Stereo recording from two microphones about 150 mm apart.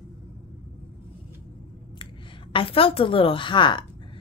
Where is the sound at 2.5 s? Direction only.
35° left (ahead or behind).